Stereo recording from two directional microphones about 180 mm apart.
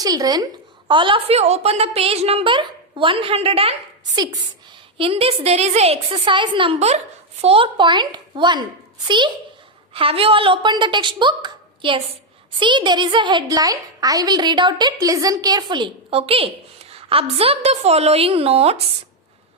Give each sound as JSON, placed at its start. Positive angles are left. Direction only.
{"t": 0.0, "sound": "a woman's voice", "side_deg": -20}